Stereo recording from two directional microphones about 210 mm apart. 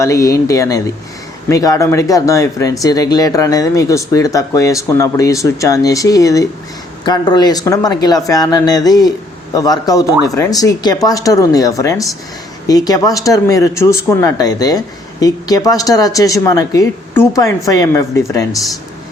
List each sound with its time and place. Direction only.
0.0 s speech: 15° left (ahead or behind)